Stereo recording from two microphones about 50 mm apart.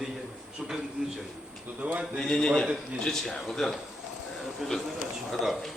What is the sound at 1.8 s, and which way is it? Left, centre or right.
Speech, right.